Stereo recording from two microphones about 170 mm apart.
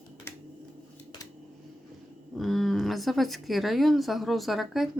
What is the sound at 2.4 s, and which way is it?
Speech, centre (ahead or behind).